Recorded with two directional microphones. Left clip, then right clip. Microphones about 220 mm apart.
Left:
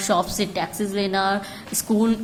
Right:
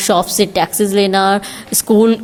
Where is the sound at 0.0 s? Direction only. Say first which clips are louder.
Right 8 dB; 35° right (ahead or behind).